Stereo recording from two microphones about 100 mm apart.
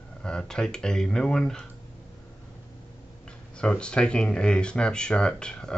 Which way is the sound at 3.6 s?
10° left (ahead or behind).